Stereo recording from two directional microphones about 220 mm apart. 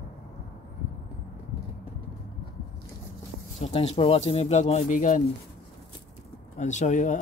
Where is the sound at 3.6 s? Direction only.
30° left (ahead or behind).